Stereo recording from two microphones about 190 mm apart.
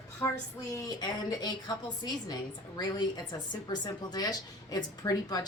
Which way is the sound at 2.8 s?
20° left (ahead or behind).